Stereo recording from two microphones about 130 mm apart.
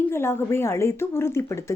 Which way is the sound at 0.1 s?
20° left (ahead or behind).